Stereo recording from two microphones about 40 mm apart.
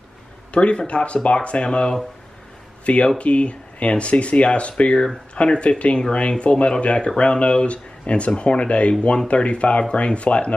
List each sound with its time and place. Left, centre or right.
0.5 s speech: left